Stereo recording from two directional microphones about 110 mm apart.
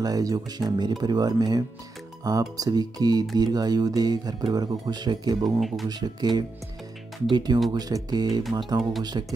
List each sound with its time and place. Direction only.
0.0 s speech: 35° right (ahead or behind)
5.6 s speech: centre (ahead or behind)
5.9 s speech: 40° right (ahead or behind)